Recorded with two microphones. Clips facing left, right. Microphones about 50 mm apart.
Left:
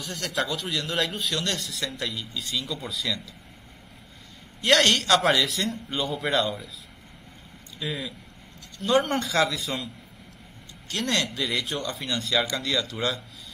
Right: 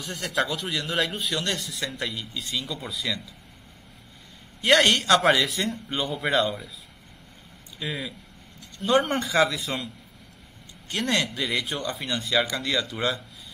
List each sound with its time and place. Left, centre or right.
0.0 s speech: centre
4.6 s speech: centre
7.8 s speech: centre
9.7 s speech: centre
11.2 s speech: centre